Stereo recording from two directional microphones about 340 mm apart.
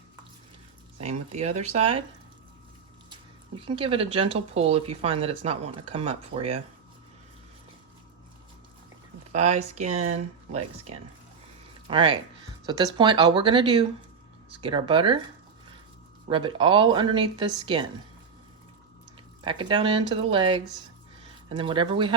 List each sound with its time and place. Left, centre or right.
1.0 s speech: centre
3.1 s speech: centre
9.3 s speech: centre
16.3 s speech: centre
19.5 s speech: centre